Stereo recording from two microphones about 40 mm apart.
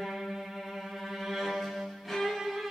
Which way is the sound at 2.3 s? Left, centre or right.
Centre.